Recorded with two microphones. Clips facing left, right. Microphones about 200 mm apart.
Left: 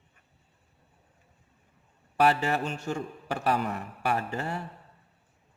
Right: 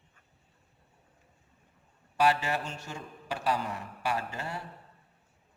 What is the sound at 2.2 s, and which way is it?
A man's voice, 50° left (ahead or behind).